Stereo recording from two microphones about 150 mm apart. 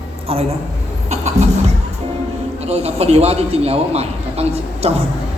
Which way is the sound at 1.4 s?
45° right (ahead or behind).